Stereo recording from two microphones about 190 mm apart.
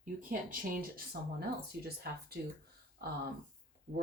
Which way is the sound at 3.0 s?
55° right (ahead or behind).